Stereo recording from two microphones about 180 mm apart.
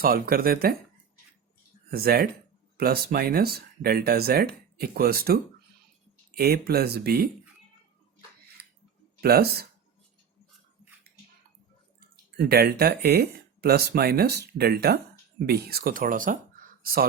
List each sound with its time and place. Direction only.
0.0 s speech: 55° right (ahead or behind)
1.9 s speech: 60° right (ahead or behind)
9.2 s speech: 60° right (ahead or behind)
11.9 s speech: 60° right (ahead or behind)